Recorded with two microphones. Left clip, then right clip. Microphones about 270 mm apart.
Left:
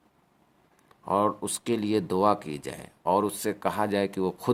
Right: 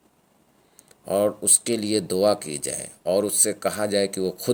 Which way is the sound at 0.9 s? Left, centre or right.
Centre.